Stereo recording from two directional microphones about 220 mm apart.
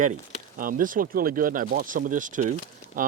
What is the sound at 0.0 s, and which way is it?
Speech, 35° right (ahead or behind).